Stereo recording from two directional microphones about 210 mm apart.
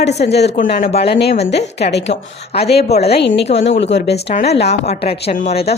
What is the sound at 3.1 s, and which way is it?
A woman's voice, 50° left (ahead or behind).